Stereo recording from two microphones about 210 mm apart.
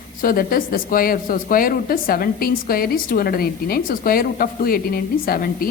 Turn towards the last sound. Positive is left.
turn(degrees=45)  # may be behind; listen again after turning